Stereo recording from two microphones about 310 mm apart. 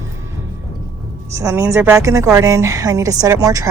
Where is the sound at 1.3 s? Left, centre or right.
Centre.